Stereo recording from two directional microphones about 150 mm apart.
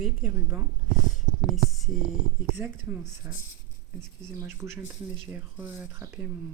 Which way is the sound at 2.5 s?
10° right (ahead or behind).